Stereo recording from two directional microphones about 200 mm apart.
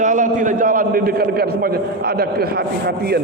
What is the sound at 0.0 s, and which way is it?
A man's voice, 40° right (ahead or behind).